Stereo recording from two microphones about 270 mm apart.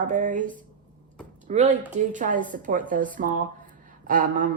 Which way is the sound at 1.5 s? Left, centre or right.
Right.